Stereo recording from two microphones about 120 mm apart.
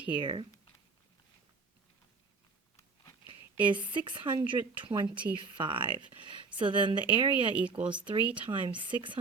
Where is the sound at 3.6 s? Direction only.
40° right (ahead or behind).